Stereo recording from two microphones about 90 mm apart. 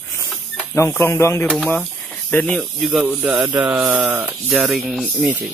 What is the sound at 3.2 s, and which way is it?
Speech, 15° right (ahead or behind).